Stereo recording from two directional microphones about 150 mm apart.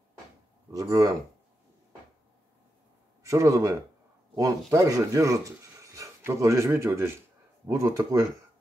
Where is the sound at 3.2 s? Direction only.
20° right (ahead or behind).